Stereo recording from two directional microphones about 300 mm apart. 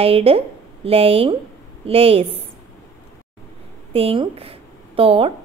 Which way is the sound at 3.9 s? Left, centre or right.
Centre.